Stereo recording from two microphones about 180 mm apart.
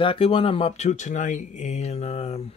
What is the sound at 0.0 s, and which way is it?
Speech, 30° left (ahead or behind).